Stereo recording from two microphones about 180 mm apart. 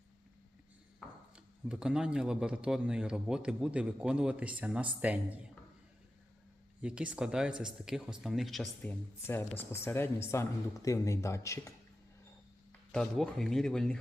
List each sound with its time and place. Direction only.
1.6 s a man's voice: 5° right (ahead or behind)
6.8 s a man's voice: 5° right (ahead or behind)
9.2 s speech: 15° left (ahead or behind)
12.9 s a man's voice: centre (ahead or behind)